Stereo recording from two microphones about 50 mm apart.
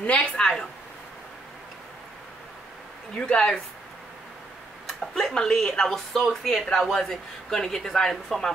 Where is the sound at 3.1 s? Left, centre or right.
Centre.